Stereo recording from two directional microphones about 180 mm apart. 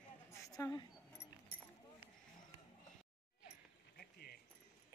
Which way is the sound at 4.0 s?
60° left (ahead or behind).